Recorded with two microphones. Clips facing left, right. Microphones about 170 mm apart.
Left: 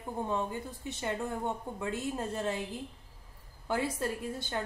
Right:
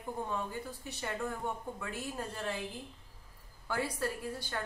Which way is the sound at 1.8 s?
25° left (ahead or behind).